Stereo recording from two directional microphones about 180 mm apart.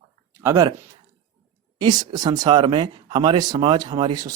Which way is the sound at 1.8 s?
20° right (ahead or behind).